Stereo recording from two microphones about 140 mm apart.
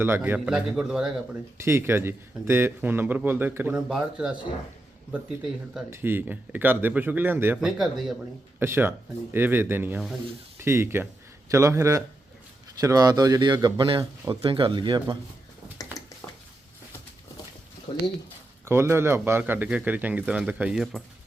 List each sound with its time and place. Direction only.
0.0 s speech: 15° right (ahead or behind)
1.5 s speech: 20° right (ahead or behind)
5.9 s speech: 15° right (ahead or behind)
7.6 s speech: centre (ahead or behind)
8.5 s speech: 15° right (ahead or behind); by 15.2 s 30° right (ahead or behind)
15.8 s a sound: 25° left (ahead or behind)
17.9 s speech: 40° left (ahead or behind)
18.6 s speech: 20° right (ahead or behind); by 21.0 s centre (ahead or behind)